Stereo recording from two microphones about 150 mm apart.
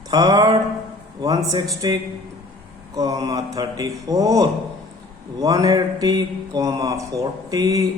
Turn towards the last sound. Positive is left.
turn(degrees=-25)  # may be behind; listen again after turning